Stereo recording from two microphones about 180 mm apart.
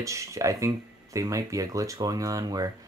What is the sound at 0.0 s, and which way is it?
A man's voice, 15° right (ahead or behind).